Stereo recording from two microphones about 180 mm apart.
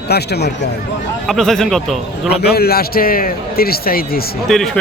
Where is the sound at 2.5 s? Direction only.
60° left (ahead or behind).